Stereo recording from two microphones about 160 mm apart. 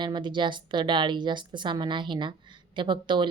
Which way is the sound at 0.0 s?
30° right (ahead or behind).